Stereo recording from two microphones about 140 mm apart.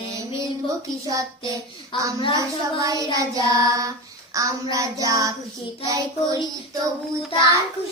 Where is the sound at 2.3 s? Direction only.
25° right (ahead or behind).